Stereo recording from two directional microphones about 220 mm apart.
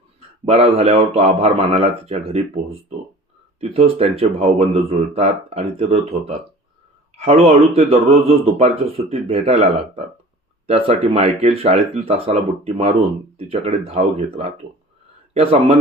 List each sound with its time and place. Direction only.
0.4 s speech: 25° right (ahead or behind)